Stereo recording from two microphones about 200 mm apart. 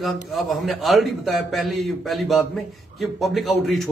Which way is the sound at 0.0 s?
Centre (ahead or behind).